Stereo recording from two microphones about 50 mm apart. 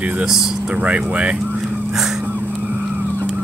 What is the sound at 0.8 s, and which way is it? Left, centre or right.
Speech, right.